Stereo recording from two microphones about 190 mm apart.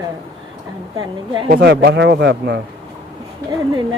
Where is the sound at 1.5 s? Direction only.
60° right (ahead or behind).